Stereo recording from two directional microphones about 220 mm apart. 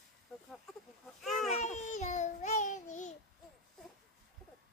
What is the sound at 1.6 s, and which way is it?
Babbling, 35° left (ahead or behind).